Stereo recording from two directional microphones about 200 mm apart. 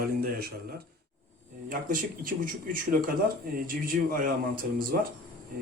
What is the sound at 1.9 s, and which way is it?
A man's voice, 45° right (ahead or behind).